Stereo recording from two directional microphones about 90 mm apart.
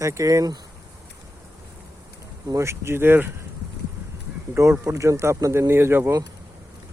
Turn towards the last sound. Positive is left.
turn(degrees=-25)  # may be behind; listen again after turning